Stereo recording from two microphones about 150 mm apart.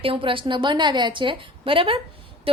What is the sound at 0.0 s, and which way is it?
Speech, 35° right (ahead or behind).